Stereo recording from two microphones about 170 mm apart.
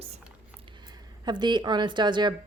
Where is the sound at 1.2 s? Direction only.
25° right (ahead or behind).